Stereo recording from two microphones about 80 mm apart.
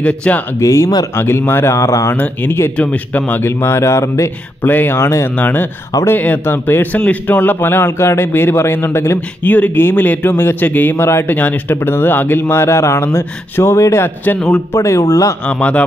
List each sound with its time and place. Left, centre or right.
0.0 s speech: centre
0.6 s speech: left
2.1 s a man's voice: left
3.4 s speech: left
4.6 s speech: left
5.4 s a man's voice: left
14.7 s speech: left
15.4 s speech: centre